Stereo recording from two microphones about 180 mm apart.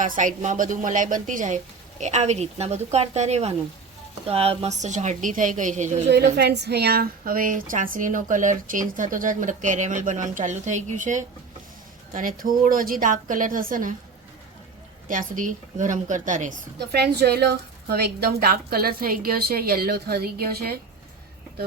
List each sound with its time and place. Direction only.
0.0 s a woman's voice: 45° right (ahead or behind)
6.1 s speech: 65° right (ahead or behind)
15.0 s speech: 45° right (ahead or behind)
16.9 s a woman's voice: 65° right (ahead or behind)